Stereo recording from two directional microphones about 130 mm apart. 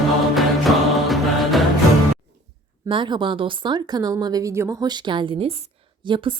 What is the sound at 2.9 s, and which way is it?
Speech, 40° right (ahead or behind).